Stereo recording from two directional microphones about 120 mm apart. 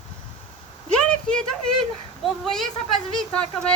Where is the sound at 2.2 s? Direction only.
5° left (ahead or behind).